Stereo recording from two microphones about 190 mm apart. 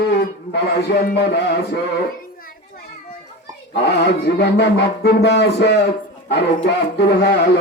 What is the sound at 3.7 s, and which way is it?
Speech, 60° left (ahead or behind).